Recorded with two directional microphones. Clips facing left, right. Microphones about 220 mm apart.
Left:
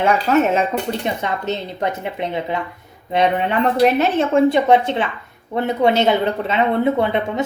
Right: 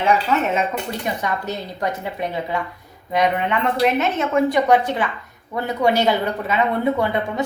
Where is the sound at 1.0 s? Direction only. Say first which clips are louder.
Left 2 dB; 25° left (ahead or behind).